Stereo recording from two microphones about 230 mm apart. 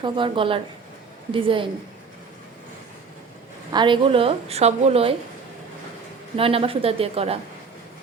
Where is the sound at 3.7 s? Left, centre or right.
Right.